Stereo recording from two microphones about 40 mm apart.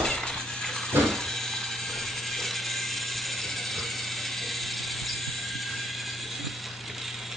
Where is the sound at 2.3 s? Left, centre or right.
Centre.